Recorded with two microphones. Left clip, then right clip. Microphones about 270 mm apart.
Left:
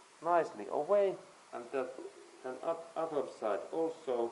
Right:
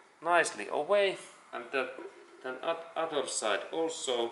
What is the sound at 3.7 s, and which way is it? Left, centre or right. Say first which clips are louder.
Speech: right 2 dB; left.